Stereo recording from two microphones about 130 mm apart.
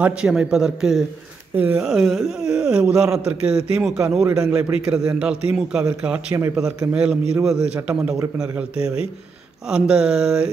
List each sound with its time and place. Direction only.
0.0 s speech: 5° right (ahead or behind)
1.6 s a man's voice: 15° right (ahead or behind)
1.9 s a man's voice: centre (ahead or behind)